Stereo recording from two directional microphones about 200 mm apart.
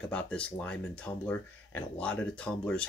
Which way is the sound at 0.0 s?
5° left (ahead or behind).